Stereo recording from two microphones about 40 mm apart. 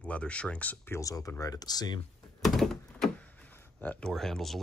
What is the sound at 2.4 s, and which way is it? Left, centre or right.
Thunk, centre.